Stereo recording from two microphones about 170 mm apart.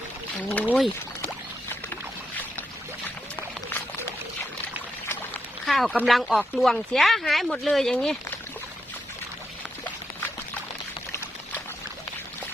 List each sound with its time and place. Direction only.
0.4 s speech: 10° left (ahead or behind)
5.6 s speech: centre (ahead or behind)